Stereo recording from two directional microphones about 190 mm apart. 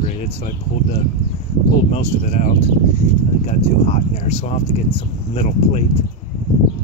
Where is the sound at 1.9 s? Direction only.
35° left (ahead or behind).